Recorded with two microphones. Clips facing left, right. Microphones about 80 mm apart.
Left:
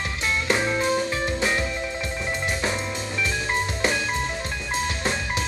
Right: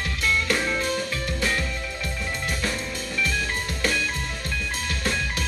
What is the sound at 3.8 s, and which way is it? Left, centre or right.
Music, left.